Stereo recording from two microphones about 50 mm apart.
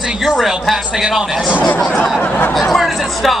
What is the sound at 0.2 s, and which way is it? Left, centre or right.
Speech, centre.